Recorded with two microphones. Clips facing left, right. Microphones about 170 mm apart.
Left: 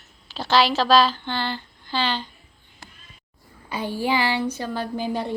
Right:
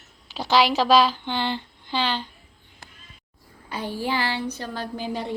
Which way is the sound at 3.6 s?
10° left (ahead or behind).